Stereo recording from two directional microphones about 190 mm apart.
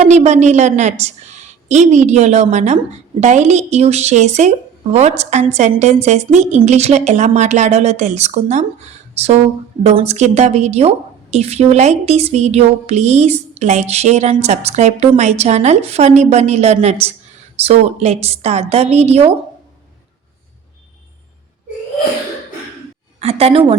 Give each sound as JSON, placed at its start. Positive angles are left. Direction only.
{"t": 0.0, "sound": "a woman's voice", "side_deg": -35}
{"t": 23.2, "sound": "a woman's voice", "side_deg": -35}